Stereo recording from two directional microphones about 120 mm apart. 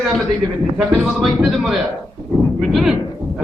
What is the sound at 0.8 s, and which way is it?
A man's voice, 5° right (ahead or behind).